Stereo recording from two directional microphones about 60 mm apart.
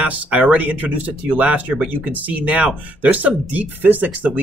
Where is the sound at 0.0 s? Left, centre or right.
Right.